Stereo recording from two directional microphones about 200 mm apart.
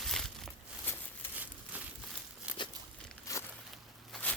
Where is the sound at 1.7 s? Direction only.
10° right (ahead or behind).